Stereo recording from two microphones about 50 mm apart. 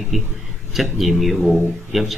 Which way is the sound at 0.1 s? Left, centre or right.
Centre.